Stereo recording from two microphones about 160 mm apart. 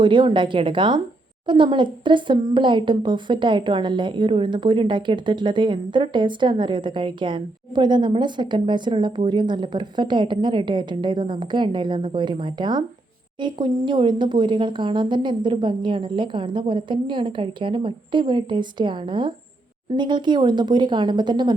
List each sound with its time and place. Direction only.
0.0 s a woman's voice: 30° right (ahead or behind)